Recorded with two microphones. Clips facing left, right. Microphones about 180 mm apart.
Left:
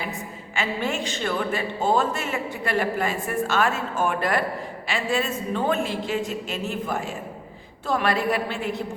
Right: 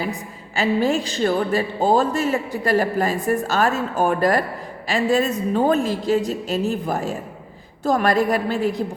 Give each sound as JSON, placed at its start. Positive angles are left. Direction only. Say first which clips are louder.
{"t": 0.5, "sound": "a woman's voice", "louder": "right 8 dB", "side_deg": -35}